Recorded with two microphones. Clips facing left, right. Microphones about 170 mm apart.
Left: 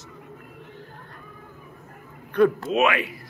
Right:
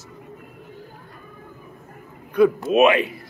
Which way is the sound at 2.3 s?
10° right (ahead or behind).